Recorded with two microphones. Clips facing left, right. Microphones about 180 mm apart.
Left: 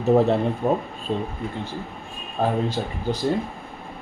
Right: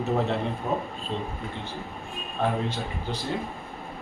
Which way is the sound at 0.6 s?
55° left (ahead or behind).